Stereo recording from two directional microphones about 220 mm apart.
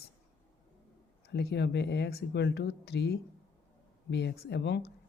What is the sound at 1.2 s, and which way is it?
Speech, 50° left (ahead or behind).